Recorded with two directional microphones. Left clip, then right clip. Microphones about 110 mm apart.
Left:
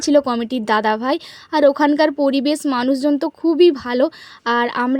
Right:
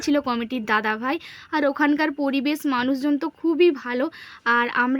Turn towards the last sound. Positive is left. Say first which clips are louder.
# left 2 dB
turn(degrees=25)  # may be behind; listen again after turning